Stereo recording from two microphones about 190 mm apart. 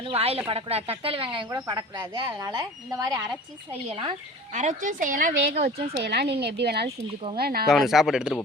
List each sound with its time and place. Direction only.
0.0 s speech: 30° right (ahead or behind)
3.7 s a woman's voice: 30° right (ahead or behind)
6.0 s speech: 60° right (ahead or behind)
7.7 s speech: centre (ahead or behind)